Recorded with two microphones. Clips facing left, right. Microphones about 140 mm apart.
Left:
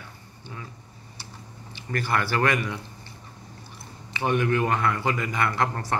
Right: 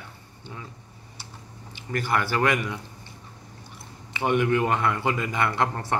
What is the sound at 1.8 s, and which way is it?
Speech, 15° right (ahead or behind).